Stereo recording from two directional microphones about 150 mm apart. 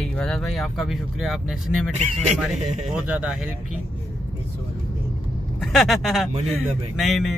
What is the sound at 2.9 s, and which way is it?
Speech, 10° right (ahead or behind).